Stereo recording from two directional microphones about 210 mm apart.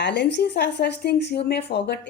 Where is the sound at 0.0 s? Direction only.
55° left (ahead or behind).